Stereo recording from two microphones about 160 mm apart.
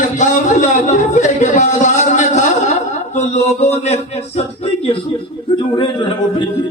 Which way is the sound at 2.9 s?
45° left (ahead or behind).